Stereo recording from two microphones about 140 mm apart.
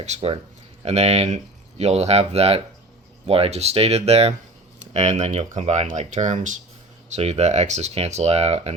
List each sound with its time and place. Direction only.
0.0 s speech: 50° right (ahead or behind)